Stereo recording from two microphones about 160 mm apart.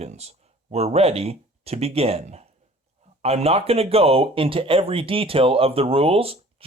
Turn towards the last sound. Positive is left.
turn(degrees=-35)  # may be behind; listen again after turning